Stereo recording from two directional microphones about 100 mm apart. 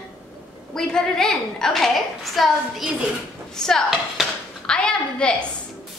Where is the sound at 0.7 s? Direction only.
5° left (ahead or behind).